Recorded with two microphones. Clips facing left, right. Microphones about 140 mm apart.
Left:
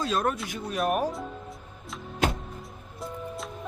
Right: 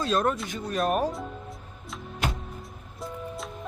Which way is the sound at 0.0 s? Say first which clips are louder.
Right 2 dB; centre (ahead or behind).